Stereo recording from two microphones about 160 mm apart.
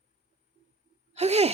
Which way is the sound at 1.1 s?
40° right (ahead or behind).